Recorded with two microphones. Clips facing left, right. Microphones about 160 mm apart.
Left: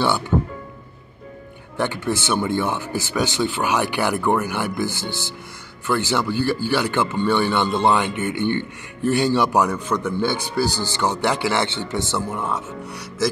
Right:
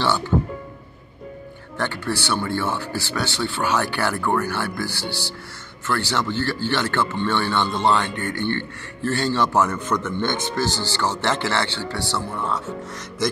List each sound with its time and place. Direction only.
1.8 s speech: 20° left (ahead or behind)